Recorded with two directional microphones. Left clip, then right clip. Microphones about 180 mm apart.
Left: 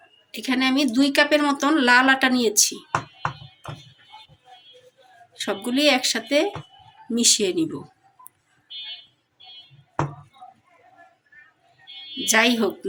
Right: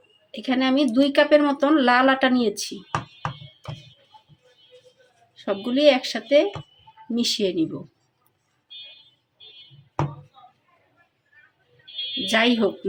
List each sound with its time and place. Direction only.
0.3 s speech: 25° right (ahead or behind)
5.3 s speech: 25° right (ahead or behind)
12.2 s speech: 25° right (ahead or behind)